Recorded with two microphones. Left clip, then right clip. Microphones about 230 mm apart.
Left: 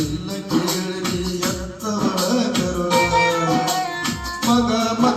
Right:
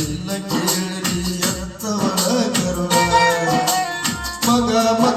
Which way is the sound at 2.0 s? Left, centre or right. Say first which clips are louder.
Right 1 dB; right.